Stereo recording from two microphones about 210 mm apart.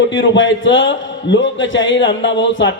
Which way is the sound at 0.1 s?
60° left (ahead or behind).